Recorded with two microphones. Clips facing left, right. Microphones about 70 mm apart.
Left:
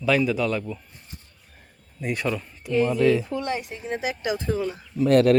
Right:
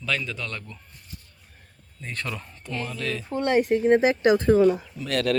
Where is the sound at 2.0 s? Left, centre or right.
Centre.